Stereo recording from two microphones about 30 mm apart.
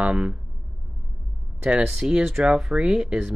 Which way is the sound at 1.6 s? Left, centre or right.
Right.